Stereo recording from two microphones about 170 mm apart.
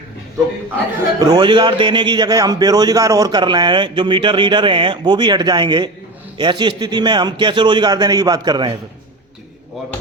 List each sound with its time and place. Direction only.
1.2 s a man's voice: 25° right (ahead or behind)